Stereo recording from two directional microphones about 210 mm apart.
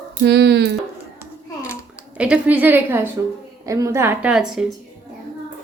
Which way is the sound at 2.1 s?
5° right (ahead or behind).